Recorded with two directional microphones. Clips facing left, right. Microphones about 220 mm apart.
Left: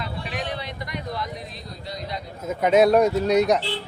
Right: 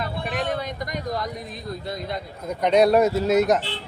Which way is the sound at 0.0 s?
50° right (ahead or behind).